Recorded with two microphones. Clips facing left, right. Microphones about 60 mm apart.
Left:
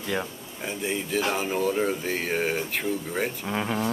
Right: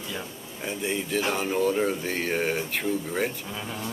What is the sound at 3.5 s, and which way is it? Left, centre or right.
Speech, left.